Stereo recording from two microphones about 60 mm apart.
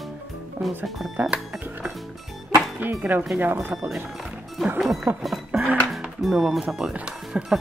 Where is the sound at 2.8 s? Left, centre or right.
Right.